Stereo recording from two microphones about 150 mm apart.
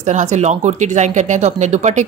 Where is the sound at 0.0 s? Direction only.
50° right (ahead or behind).